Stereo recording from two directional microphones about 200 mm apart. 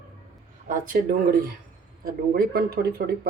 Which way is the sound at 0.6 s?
45° right (ahead or behind).